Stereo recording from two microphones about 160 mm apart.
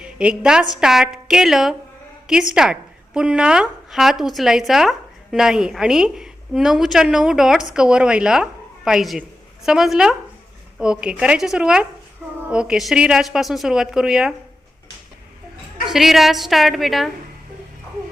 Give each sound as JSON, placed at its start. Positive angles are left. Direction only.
{"t": 0.0, "sound": "a woman's voice", "side_deg": -5}
{"t": 15.9, "sound": "speech", "side_deg": 0}